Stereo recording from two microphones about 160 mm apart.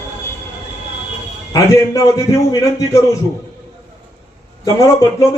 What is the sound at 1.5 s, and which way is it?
A man's voice, 20° left (ahead or behind).